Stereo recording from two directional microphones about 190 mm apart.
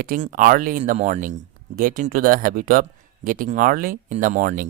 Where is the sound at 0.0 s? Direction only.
45° right (ahead or behind).